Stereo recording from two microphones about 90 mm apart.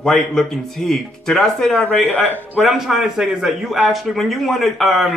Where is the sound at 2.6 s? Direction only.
5° right (ahead or behind).